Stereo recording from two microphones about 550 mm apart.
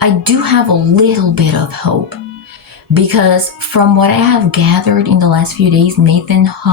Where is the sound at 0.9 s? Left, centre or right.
Right.